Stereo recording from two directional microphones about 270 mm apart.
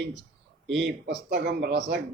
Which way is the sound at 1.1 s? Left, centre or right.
Right.